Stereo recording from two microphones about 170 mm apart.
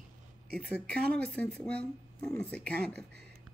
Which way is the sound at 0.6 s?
5° left (ahead or behind).